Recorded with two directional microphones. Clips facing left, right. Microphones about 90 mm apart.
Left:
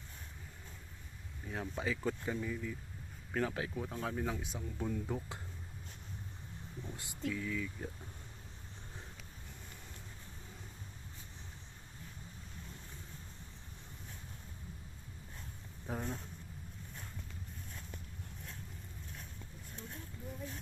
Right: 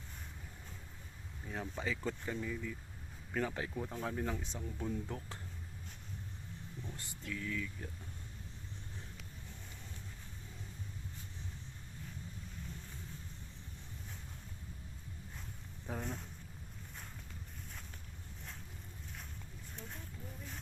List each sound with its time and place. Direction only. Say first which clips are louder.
1.5 s speech: left 2 dB; centre (ahead or behind)
6.8 s a sound: left 1 dB; 15° left (ahead or behind)
7.3 s speech: left 3 dB; 10° left (ahead or behind)
15.9 s speech: left 2 dB; 5° left (ahead or behind)